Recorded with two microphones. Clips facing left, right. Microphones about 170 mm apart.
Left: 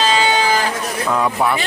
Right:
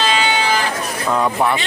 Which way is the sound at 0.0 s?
35° left (ahead or behind).